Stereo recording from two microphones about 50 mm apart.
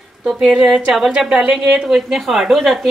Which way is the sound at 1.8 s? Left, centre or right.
Centre.